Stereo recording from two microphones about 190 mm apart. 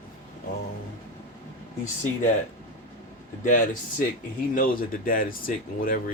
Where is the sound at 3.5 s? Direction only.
45° left (ahead or behind).